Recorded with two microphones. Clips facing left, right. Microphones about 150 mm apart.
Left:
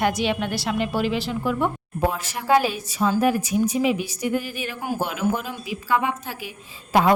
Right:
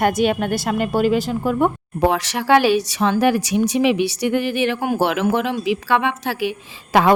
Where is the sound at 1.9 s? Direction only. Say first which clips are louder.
Right 7 dB; 80° right.